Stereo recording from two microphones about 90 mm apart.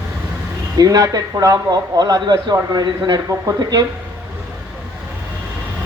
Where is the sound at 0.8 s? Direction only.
45° right (ahead or behind).